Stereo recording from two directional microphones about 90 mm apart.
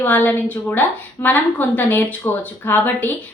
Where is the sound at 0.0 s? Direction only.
20° left (ahead or behind).